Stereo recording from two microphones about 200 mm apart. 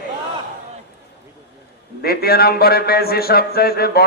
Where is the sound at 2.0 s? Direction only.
50° left (ahead or behind).